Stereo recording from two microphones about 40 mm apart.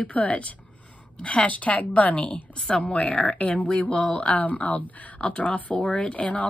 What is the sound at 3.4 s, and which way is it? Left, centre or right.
Speech, left.